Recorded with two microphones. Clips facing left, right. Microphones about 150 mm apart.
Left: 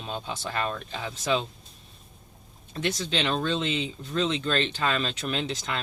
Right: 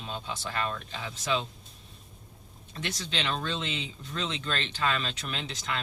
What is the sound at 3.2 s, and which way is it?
Speech, 30° left (ahead or behind).